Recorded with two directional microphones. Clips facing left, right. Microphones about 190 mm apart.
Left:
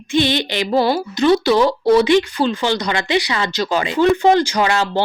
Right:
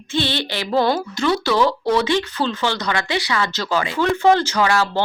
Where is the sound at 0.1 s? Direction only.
15° left (ahead or behind).